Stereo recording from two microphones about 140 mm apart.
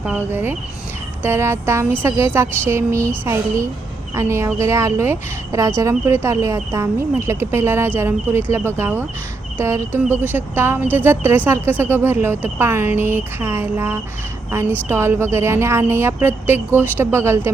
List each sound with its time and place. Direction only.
0.0 s speech: 15° right (ahead or behind)